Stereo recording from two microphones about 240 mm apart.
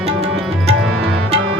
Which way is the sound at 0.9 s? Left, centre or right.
Right.